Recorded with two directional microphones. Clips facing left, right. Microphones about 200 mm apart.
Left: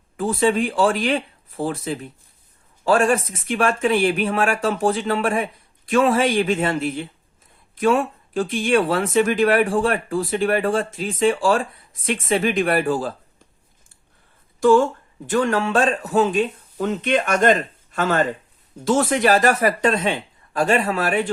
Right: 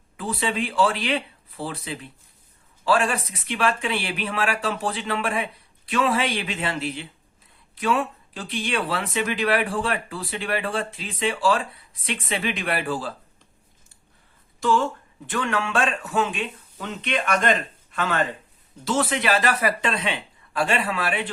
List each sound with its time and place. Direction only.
0.2 s speech: 45° left (ahead or behind)
14.6 s speech: 50° left (ahead or behind)